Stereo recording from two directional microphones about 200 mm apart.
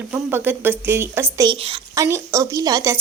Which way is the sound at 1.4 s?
30° right (ahead or behind).